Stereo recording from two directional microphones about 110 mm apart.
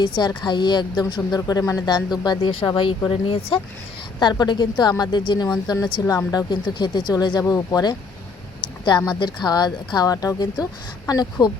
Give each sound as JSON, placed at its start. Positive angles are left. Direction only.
{"t": 0.0, "sound": "a woman's voice", "side_deg": 45}
{"t": 2.5, "sound": "a woman's voice", "side_deg": 50}
{"t": 4.2, "sound": "a woman's voice", "side_deg": 45}